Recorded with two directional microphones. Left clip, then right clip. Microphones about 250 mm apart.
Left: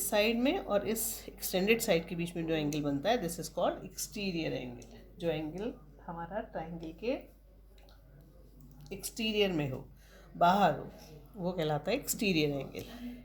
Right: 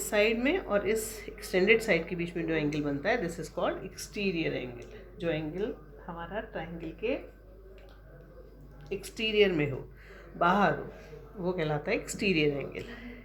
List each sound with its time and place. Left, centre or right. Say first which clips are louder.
0.1 s a woman's voice: right 3 dB; left
8.9 s a woman's voice: right 5 dB; left